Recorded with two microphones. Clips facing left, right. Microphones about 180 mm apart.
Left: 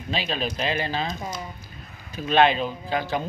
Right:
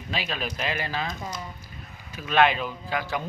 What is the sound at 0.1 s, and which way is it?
A man's voice, 25° left (ahead or behind).